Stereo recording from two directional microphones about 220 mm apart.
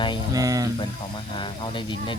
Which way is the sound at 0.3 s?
15° right (ahead or behind).